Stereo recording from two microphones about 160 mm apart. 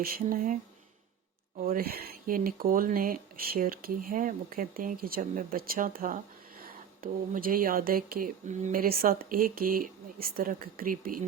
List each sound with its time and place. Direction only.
0.0 s speech: 60° right (ahead or behind)
1.6 s speech: 70° right (ahead or behind)